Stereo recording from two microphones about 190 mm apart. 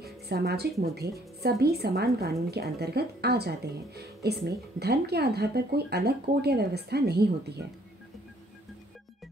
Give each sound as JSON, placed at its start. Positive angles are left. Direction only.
{"t": 0.0, "sound": "a woman's voice", "side_deg": -60}